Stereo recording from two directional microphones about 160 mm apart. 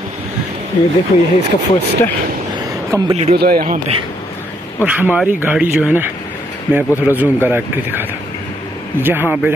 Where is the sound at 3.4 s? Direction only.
65° right (ahead or behind).